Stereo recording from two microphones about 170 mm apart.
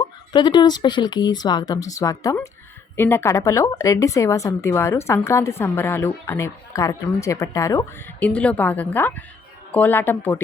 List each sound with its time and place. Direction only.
0.0 s a woman's voice: 25° left (ahead or behind)